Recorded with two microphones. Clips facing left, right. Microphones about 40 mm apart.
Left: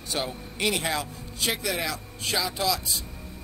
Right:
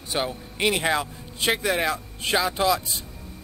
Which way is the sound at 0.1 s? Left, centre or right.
Right.